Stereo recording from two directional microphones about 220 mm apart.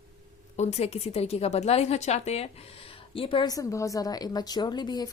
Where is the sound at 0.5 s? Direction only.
30° left (ahead or behind).